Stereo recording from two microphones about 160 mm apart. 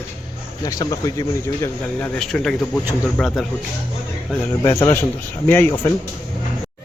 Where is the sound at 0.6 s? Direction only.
20° left (ahead or behind); by 3.5 s 5° left (ahead or behind).